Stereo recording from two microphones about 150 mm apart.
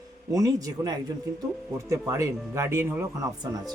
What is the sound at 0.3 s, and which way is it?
Speech, 25° right (ahead or behind).